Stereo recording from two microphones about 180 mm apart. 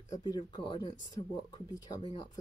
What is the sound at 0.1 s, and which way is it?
Speech, 25° left (ahead or behind).